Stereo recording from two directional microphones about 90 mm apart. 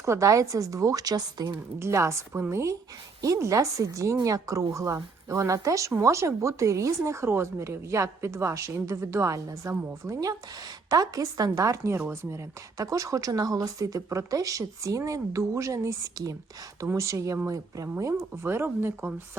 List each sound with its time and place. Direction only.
0.0 s a woman's voice: 35° right (ahead or behind)
1.8 s a woman's voice: 30° right (ahead or behind)